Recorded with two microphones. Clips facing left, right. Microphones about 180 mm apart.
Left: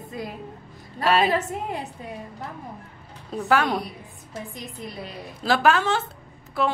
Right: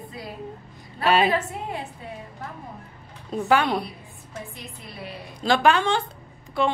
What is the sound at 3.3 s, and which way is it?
Speech, centre (ahead or behind).